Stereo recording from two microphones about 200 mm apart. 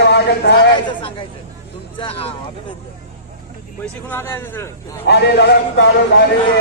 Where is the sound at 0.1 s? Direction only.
55° left (ahead or behind).